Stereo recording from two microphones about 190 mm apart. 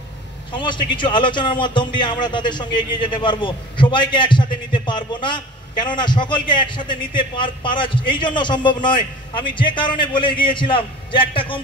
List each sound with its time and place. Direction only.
0.5 s a man's voice: 25° left (ahead or behind)